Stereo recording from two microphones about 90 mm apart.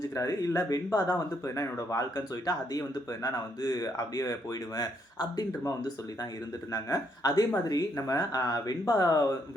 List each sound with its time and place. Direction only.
0.1 s speech: 35° left (ahead or behind)
6.7 s speech: 40° left (ahead or behind)